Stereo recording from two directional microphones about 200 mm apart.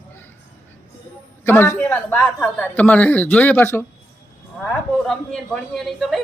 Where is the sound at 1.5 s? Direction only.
10° left (ahead or behind).